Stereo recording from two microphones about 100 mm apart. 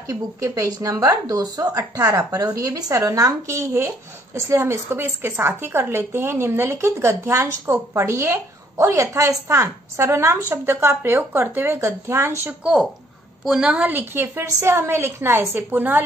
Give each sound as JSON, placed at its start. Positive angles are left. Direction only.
{"t": 0.1, "sound": "speech", "side_deg": -35}
{"t": 13.4, "sound": "speech", "side_deg": -5}